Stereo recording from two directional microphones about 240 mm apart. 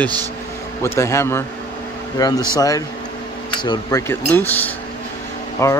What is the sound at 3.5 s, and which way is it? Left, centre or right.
Speech, centre.